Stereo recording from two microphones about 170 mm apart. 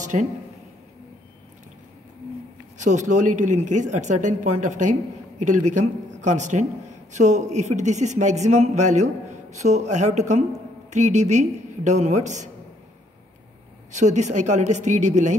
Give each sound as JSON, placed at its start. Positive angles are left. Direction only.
{"t": 0.0, "sound": "a sound", "side_deg": -45}
{"t": 2.8, "sound": "a man's voice", "side_deg": -45}
{"t": 13.9, "sound": "a man's voice", "side_deg": -45}